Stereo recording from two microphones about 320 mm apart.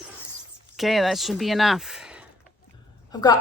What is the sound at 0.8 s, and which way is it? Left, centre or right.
Speech, centre.